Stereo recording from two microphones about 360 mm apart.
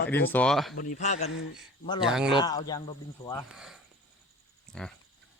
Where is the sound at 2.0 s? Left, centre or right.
Centre.